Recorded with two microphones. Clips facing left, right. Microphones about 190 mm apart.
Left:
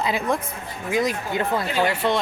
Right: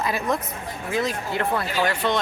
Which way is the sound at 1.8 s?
10° left (ahead or behind).